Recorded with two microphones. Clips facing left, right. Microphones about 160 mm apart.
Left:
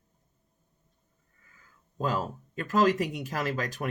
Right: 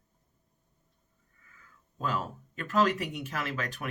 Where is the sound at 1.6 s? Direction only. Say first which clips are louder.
Left 4 dB; 35° left (ahead or behind).